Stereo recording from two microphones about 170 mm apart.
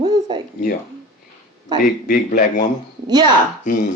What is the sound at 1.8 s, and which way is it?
Speech, 55° left (ahead or behind).